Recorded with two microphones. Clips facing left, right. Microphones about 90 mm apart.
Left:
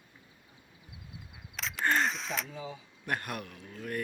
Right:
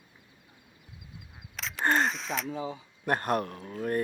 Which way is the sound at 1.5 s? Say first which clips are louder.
Right 3 dB; centre (ahead or behind).